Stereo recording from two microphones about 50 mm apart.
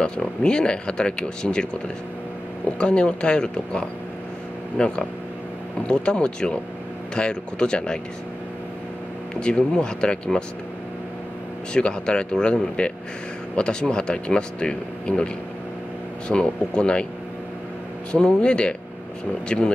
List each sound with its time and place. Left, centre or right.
0.0 s speech: centre
2.8 s speech: left
9.4 s speech: left
11.7 s speech: centre
16.3 s speech: centre
18.1 s speech: centre